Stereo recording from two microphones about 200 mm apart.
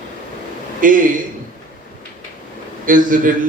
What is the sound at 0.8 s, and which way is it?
Speech, 40° right (ahead or behind).